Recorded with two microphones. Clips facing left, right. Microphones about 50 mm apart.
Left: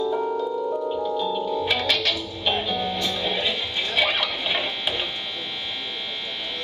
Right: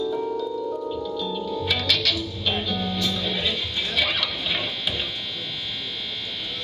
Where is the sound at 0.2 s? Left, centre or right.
Left.